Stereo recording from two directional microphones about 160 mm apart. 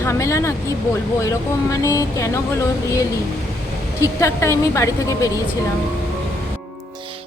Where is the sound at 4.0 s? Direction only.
15° left (ahead or behind).